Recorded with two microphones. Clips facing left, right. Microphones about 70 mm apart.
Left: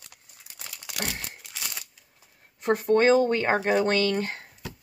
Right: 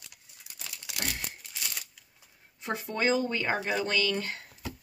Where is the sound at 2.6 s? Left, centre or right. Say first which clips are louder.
Left 9 dB; left.